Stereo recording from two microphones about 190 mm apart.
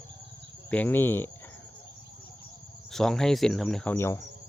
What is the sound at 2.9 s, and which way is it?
Speech, 5° left (ahead or behind).